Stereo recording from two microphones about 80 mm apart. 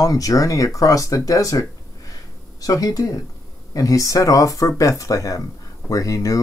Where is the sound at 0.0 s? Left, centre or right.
Left.